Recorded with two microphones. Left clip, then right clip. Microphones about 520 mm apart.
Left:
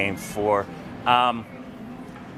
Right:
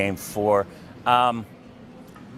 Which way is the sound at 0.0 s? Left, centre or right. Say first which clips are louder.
Right 1 dB; right.